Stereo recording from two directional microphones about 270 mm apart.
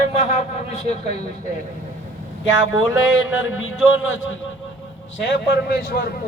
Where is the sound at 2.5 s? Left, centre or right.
Left.